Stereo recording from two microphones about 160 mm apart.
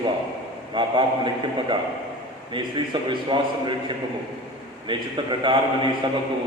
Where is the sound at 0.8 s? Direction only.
30° right (ahead or behind).